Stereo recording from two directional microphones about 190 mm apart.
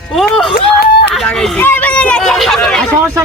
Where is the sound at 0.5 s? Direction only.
55° left (ahead or behind).